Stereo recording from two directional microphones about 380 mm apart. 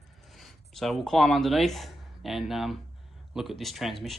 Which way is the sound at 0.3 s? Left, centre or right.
Centre.